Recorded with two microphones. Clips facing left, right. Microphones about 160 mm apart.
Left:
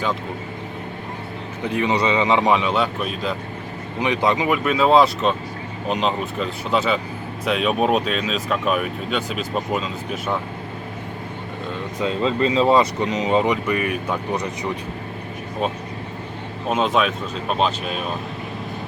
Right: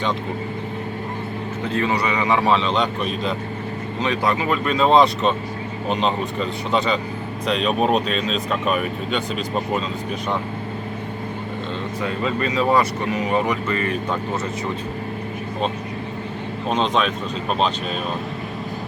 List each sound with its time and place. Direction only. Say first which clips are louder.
1.6 s speech: left 2 dB; 15° left (ahead or behind)
4.0 s speech: left 2 dB; 20° left (ahead or behind)
11.9 s speech: left 4 dB; 25° left (ahead or behind)
16.6 s speech: left 1 dB; 5° left (ahead or behind)